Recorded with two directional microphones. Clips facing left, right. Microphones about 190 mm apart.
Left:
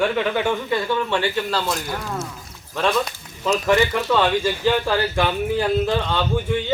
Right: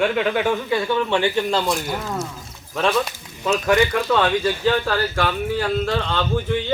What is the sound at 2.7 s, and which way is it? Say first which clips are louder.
Speech: right 1 dB; 5° right (ahead or behind).